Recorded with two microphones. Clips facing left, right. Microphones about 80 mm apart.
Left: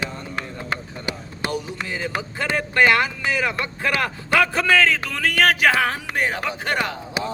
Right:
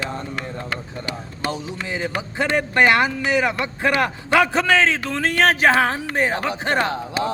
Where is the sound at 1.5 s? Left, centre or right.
Right.